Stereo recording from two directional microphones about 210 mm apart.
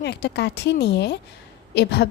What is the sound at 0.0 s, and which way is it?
A woman's voice, 50° left (ahead or behind).